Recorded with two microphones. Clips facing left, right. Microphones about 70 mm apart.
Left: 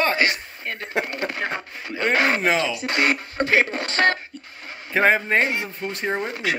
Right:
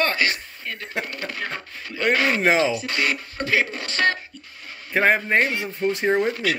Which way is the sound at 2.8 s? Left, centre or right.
Left.